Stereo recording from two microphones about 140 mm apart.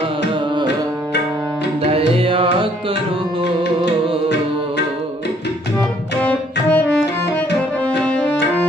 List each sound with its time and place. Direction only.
1.8 s music: 45° right (ahead or behind)
6.1 s music: 10° left (ahead or behind)
7.9 s music: 10° left (ahead or behind)